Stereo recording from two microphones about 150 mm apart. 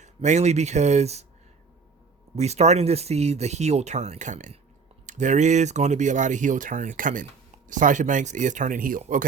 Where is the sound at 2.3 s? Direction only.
45° right (ahead or behind).